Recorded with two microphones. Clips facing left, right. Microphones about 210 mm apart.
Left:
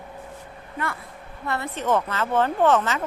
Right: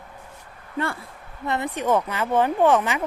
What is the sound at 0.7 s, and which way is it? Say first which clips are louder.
Speech: right 4 dB; 30° right (ahead or behind).